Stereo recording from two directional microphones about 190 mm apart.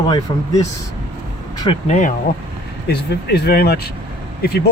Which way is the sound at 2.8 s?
60° left (ahead or behind).